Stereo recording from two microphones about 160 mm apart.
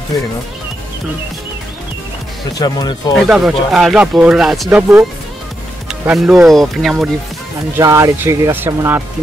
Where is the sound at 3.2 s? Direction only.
5° right (ahead or behind).